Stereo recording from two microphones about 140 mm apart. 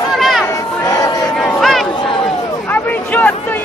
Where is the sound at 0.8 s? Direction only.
25° left (ahead or behind).